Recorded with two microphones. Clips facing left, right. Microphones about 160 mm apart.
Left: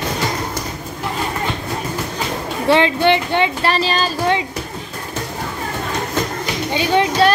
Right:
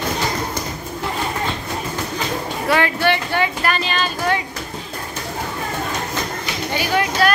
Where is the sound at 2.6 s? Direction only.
25° left (ahead or behind).